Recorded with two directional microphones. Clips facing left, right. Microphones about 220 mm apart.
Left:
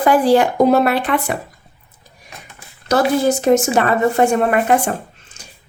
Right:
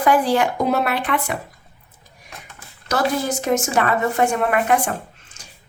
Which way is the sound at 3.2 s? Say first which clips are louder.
Left 7 dB; 30° left (ahead or behind).